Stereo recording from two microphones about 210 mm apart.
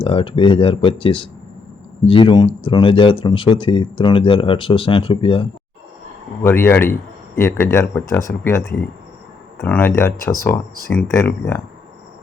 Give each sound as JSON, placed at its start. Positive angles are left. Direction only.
{"t": 0.0, "sound": "speech", "side_deg": 25}
{"t": 6.4, "sound": "speech", "side_deg": 10}